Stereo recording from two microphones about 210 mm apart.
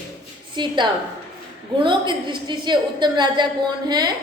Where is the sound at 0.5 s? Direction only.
20° right (ahead or behind).